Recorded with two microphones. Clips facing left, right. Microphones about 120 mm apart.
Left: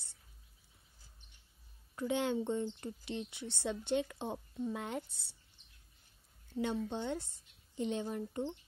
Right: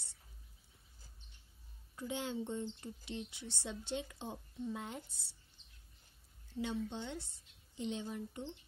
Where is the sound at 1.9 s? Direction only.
65° left (ahead or behind).